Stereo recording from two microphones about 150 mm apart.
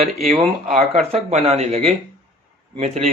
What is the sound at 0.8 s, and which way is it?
Speech, 50° right (ahead or behind).